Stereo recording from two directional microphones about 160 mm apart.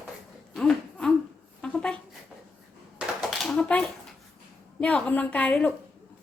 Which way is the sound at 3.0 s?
Centre (ahead or behind).